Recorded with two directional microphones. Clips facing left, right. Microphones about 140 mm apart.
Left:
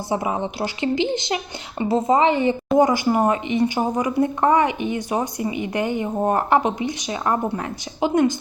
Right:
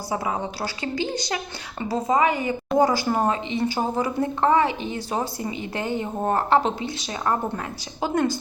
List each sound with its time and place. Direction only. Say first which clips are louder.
0.1 s a woman's voice: left 3 dB; 20° left (ahead or behind)